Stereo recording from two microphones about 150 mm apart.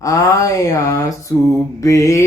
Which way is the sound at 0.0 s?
20° left (ahead or behind).